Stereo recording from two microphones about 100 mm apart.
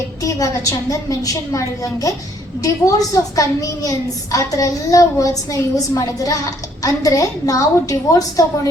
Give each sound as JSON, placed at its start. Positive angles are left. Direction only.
{"t": 0.2, "sound": "a woman's voice", "side_deg": 35}